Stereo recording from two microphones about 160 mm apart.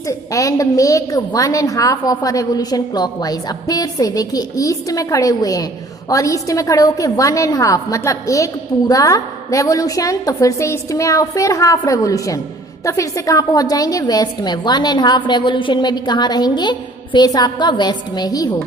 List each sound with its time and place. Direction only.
0.3 s a woman's voice: 20° left (ahead or behind)